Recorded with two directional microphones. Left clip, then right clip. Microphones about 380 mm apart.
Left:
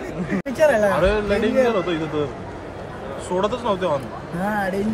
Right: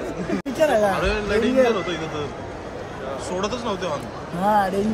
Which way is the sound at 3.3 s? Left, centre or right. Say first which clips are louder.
Left 6 dB; centre.